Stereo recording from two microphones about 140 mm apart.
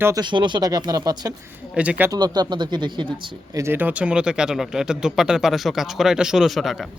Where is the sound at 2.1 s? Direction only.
30° right (ahead or behind).